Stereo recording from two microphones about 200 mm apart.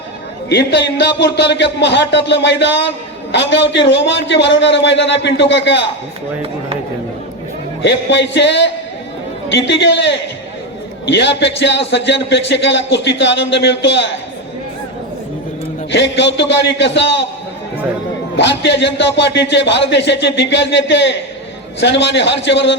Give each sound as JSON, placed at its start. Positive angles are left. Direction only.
{"t": 0.5, "sound": "speech", "side_deg": 60}
{"t": 7.8, "sound": "speech", "side_deg": 60}
{"t": 15.9, "sound": "speech", "side_deg": 65}
{"t": 18.3, "sound": "speech", "side_deg": 60}